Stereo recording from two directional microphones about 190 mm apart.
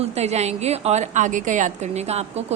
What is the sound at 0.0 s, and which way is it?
A woman's voice, 35° right (ahead or behind).